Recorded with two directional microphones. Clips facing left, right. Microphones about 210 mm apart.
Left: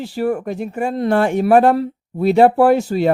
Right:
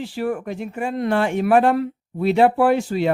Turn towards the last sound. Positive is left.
turn(degrees=40)  # may be behind; listen again after turning